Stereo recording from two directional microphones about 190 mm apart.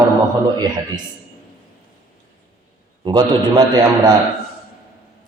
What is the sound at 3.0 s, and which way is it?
A man's voice, 20° right (ahead or behind).